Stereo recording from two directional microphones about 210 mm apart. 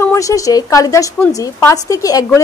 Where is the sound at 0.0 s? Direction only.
15° left (ahead or behind).